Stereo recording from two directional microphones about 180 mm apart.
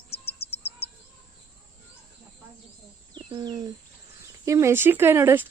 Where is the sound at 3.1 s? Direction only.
25° right (ahead or behind).